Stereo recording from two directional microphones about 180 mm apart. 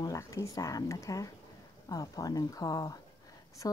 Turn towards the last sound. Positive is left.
turn(degrees=20)  # may be behind; listen again after turning